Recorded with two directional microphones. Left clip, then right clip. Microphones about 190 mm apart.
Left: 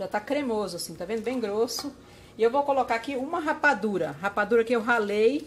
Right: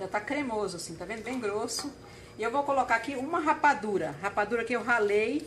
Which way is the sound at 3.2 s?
55° left (ahead or behind).